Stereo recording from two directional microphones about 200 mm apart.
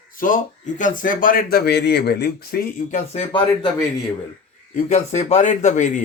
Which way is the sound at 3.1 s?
30° left (ahead or behind).